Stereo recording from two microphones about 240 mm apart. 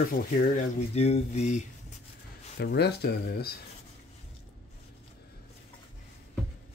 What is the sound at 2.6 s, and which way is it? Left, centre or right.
Speech, left.